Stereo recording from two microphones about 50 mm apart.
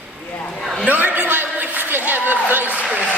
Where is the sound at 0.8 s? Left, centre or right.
Right.